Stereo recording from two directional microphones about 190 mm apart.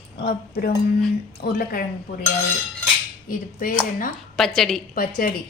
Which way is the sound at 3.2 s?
45° left (ahead or behind).